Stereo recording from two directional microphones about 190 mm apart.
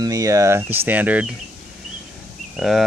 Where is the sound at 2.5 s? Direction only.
Centre (ahead or behind).